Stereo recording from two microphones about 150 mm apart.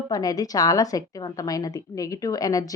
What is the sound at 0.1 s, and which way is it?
A woman's voice, 25° left (ahead or behind).